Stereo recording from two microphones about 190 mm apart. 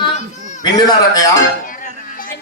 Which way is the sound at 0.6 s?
20° left (ahead or behind).